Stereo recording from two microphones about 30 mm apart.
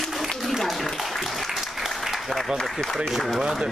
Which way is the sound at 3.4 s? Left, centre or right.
Right.